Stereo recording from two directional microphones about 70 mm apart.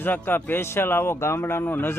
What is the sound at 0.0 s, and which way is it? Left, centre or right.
Speech, left.